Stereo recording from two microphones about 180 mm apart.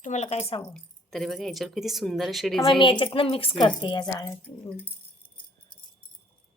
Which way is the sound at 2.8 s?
25° left (ahead or behind).